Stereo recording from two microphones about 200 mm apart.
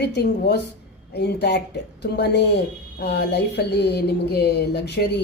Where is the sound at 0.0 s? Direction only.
55° left (ahead or behind).